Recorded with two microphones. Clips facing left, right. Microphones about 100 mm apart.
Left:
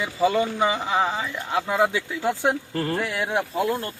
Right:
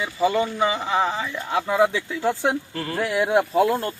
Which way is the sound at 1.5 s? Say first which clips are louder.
Right 2 dB; centre (ahead or behind).